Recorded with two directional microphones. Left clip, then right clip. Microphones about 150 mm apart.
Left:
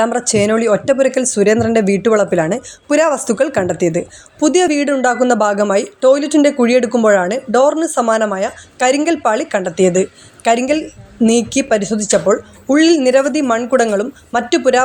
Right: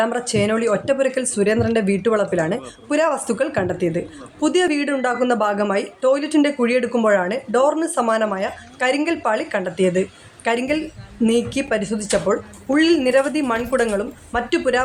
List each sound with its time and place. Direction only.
0.0 s speech: 30° left (ahead or behind)